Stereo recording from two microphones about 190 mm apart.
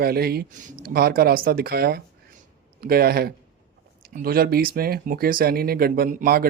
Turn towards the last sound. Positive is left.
turn(degrees=-50)  # may be behind; listen again after turning